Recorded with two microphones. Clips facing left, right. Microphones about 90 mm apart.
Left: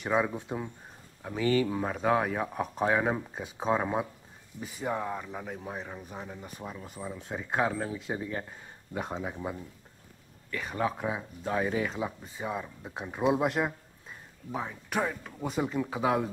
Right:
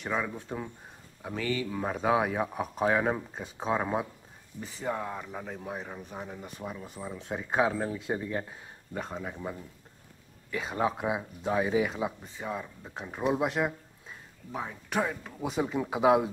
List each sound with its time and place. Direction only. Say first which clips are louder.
0.1 s speech: left 5 dB; 15° left (ahead or behind)
1.2 s speech: right 1 dB; 15° right (ahead or behind)
1.8 s speech: even; centre (ahead or behind)
9.2 s speech: left 2 dB; 10° left (ahead or behind)
10.5 s speech: right 2 dB; 15° right (ahead or behind)
12.4 s speech: left 3 dB; 5° left (ahead or behind)
15.8 s speech: right 6 dB; 15° right (ahead or behind)